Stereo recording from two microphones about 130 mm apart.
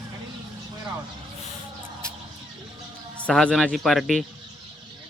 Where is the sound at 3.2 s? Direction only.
10° left (ahead or behind).